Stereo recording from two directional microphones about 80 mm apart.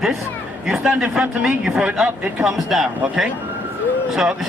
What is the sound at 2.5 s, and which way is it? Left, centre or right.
Speech, centre.